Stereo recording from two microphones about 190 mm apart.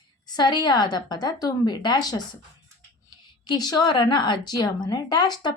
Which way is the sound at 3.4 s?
20° left (ahead or behind).